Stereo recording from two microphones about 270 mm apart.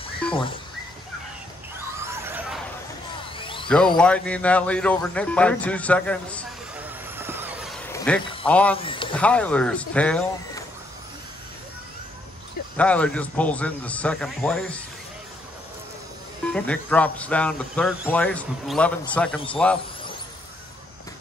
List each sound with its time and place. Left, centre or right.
2.1 s vehicle: centre
3.3 s a sound: centre
3.6 s speech: centre
7.2 s vehicle: centre
7.8 s a sound: centre
8.5 s speech: centre
8.7 s speech: centre
9.1 s speech: centre
12.7 s speech: centre
16.5 s speech: centre